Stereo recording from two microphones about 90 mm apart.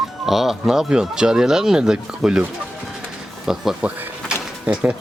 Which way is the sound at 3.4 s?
5° right (ahead or behind).